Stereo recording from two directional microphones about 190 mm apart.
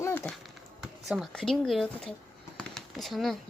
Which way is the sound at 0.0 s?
10° left (ahead or behind).